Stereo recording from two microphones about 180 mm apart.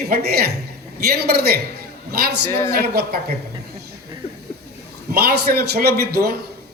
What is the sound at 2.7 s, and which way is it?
Speech, 60° right (ahead or behind).